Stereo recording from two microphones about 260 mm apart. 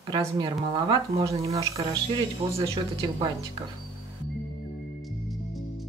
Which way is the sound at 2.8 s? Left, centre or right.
Centre.